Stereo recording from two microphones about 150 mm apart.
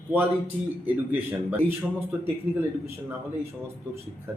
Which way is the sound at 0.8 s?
10° right (ahead or behind).